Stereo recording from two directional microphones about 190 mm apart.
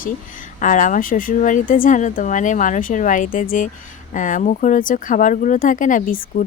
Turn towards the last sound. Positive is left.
turn(degrees=45)  # may be behind; listen again after turning